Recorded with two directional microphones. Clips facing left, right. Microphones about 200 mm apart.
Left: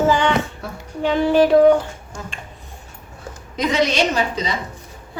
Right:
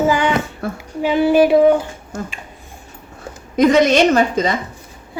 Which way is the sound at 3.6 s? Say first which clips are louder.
Right 7 dB; 50° right (ahead or behind).